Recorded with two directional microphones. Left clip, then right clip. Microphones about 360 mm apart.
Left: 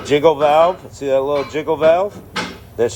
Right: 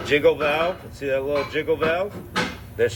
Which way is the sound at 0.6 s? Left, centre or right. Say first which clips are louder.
Left 10 dB; left.